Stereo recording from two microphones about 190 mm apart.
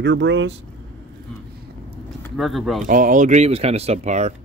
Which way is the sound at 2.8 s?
45° right (ahead or behind).